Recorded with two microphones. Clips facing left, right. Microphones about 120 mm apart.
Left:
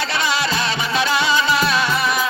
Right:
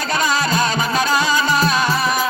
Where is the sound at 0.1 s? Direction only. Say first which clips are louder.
Right 2 dB; 45° right (ahead or behind).